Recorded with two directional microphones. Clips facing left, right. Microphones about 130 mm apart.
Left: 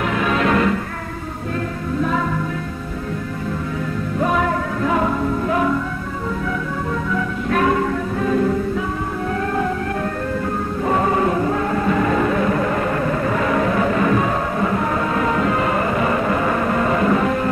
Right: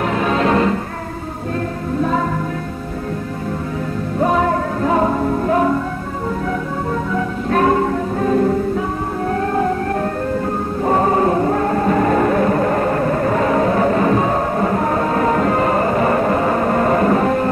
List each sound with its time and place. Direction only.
0.0 s music: 35° right (ahead or behind)
4.2 s music: 35° right (ahead or behind)
6.9 s music: 35° right (ahead or behind)
9.3 s a sound: 35° right (ahead or behind)
10.8 s music: 35° right (ahead or behind)